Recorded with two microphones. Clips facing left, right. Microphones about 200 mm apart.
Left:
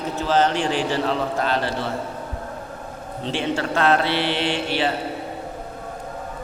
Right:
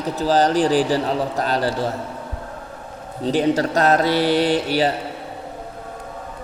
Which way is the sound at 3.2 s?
40° right (ahead or behind).